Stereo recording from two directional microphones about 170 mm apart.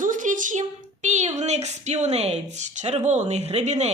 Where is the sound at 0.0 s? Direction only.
50° right (ahead or behind).